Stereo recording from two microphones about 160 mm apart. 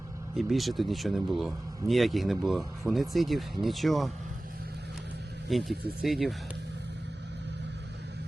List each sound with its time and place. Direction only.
0.3 s speech: centre (ahead or behind)
5.5 s speech: centre (ahead or behind)